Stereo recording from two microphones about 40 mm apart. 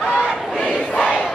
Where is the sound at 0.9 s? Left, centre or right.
Left.